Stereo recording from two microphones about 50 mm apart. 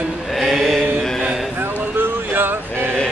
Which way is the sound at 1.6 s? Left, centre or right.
Right.